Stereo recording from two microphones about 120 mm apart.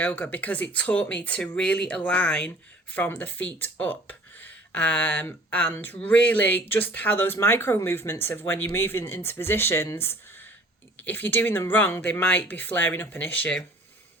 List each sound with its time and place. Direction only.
0.0 s speech: 15° left (ahead or behind)